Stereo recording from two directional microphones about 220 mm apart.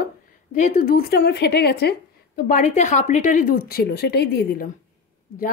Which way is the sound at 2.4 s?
35° left (ahead or behind).